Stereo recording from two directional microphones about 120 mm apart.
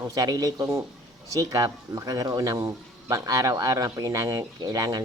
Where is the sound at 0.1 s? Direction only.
35° right (ahead or behind).